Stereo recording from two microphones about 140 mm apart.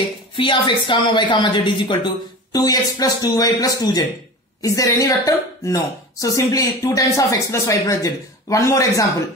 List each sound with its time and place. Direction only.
0.4 s speech: 35° left (ahead or behind)